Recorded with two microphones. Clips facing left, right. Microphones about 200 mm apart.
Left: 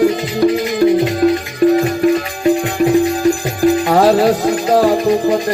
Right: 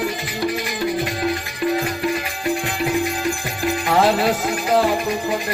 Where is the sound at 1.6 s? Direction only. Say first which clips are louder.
Left 10 dB; 45° left (ahead or behind).